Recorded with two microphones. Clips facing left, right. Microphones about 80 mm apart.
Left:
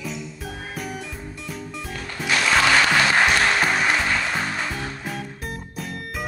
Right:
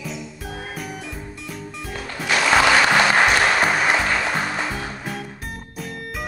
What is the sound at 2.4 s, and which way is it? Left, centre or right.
Music, right.